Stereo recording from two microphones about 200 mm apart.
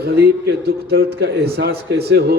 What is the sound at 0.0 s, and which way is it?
A man's voice, 50° right (ahead or behind).